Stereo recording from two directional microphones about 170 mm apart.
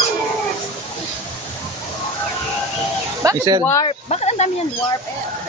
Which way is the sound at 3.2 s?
20° right (ahead or behind).